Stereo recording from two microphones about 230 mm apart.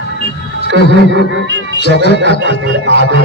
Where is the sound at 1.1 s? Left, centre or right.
Right.